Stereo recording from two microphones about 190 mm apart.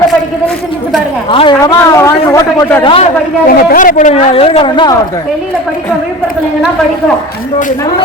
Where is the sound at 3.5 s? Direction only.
50° left (ahead or behind).